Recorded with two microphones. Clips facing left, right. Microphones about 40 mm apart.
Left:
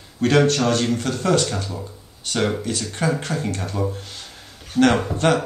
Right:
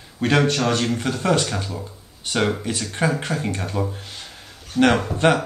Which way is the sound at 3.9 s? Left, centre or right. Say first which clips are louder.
Even; centre.